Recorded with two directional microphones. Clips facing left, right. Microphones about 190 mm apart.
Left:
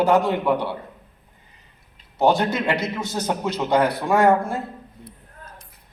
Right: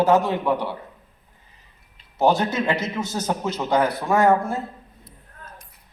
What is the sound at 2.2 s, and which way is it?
A man's voice, 15° left (ahead or behind).